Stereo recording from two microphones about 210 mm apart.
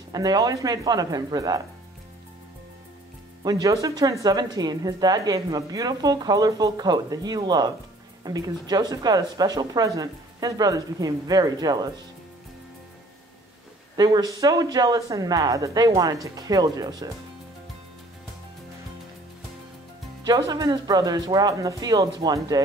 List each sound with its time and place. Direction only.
0.1 s speech: 20° right (ahead or behind)
3.4 s a woman's voice: 15° right (ahead or behind)
13.9 s a woman's voice: 20° right (ahead or behind)
20.2 s a woman's voice: 15° right (ahead or behind)